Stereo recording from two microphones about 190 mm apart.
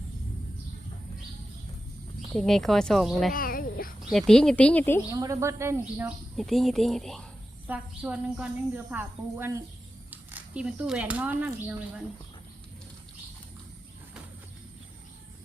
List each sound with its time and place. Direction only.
2.3 s speech: 5° left (ahead or behind)
3.3 s a sound: 50° left (ahead or behind)
4.1 s speech: centre (ahead or behind)
5.1 s a woman's voice: 15° right (ahead or behind)
6.3 s a woman's voice: centre (ahead or behind)